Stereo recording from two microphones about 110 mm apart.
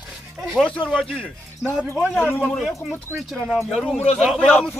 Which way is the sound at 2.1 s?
20° left (ahead or behind).